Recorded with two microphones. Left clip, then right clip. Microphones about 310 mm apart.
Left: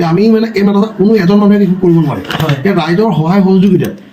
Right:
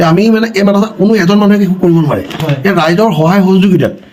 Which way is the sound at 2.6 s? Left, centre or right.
Right.